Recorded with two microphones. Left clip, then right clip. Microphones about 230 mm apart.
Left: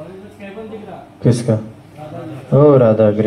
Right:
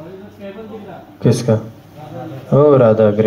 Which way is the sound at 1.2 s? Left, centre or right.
Right.